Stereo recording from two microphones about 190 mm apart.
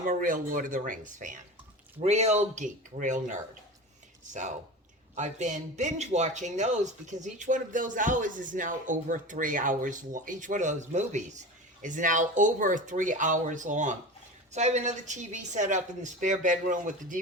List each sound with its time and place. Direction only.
0.0 s speech: 45° right (ahead or behind)